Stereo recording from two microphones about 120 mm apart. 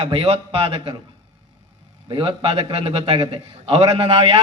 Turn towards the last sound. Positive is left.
turn(degrees=-55)  # may be behind; listen again after turning